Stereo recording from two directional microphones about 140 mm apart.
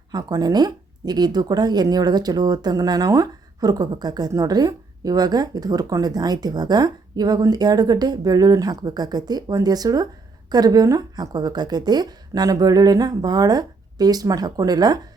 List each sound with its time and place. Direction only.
0.1 s a woman's voice: 30° right (ahead or behind)